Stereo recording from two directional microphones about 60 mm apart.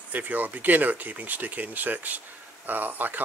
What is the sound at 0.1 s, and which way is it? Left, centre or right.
Speech, right.